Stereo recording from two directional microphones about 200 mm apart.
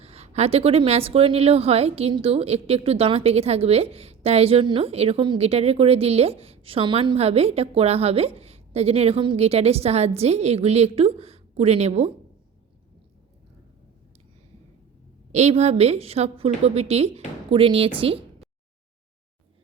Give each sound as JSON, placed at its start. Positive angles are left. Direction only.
{"t": 0.0, "sound": "speech", "side_deg": -30}
{"t": 15.3, "sound": "speech", "side_deg": -35}